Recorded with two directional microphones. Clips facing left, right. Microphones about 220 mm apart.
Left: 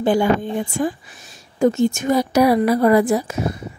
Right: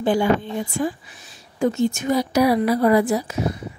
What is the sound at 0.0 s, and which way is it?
Speech, 50° left (ahead or behind).